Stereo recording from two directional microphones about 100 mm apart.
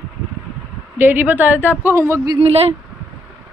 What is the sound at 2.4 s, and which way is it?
Speech, 90° right.